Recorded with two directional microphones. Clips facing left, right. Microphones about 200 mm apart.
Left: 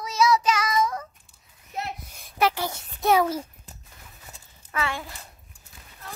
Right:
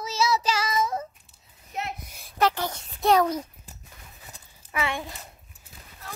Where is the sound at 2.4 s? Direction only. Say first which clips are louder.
Even; 10° left (ahead or behind).